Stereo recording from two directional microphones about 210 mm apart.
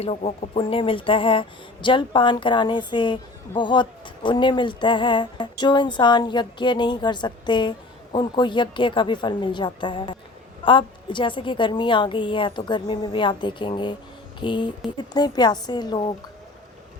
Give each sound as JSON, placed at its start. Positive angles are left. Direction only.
{"t": 0.0, "sound": "speech", "side_deg": 30}